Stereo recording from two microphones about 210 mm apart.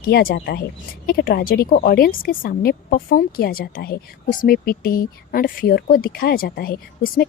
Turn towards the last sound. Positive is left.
turn(degrees=45)  # may be behind; listen again after turning